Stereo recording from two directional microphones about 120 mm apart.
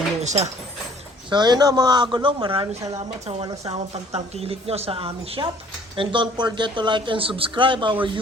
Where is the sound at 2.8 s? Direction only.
25° right (ahead or behind).